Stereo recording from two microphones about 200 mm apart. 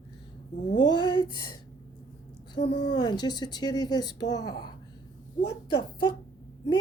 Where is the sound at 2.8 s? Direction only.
20° left (ahead or behind).